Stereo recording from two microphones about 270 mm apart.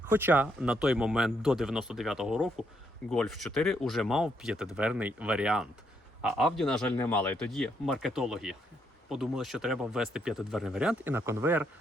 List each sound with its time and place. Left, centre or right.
0.1 s speech: centre